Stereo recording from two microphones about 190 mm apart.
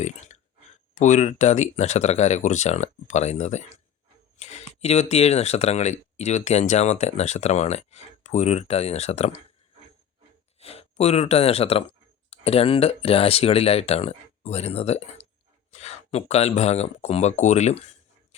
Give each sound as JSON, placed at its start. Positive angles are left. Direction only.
{"t": 0.0, "sound": "speech", "side_deg": 40}
{"t": 10.6, "sound": "speech", "side_deg": 30}